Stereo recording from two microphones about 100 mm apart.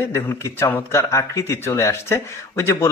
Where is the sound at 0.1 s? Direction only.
25° left (ahead or behind).